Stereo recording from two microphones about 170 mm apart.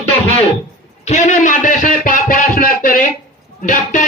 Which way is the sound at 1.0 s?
40° left (ahead or behind).